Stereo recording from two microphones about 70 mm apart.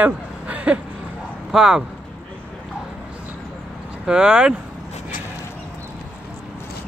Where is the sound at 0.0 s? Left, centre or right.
Centre.